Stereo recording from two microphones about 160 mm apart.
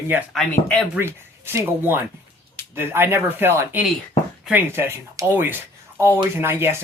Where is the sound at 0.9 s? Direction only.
15° right (ahead or behind).